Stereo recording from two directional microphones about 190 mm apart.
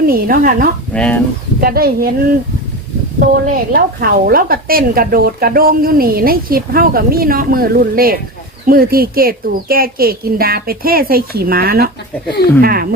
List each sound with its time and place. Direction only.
0.0 s speech: 50° right (ahead or behind)
0.9 s speech: 5° left (ahead or behind)
1.6 s speech: 50° right (ahead or behind)